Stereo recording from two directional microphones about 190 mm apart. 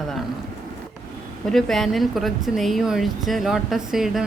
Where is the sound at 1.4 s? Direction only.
Centre (ahead or behind).